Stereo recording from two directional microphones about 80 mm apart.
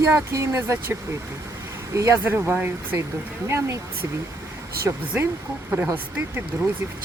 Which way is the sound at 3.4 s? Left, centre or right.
Right.